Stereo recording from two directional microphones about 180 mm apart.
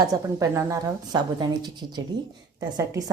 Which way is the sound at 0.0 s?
20° right (ahead or behind).